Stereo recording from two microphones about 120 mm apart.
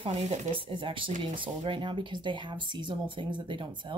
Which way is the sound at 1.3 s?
45° right (ahead or behind).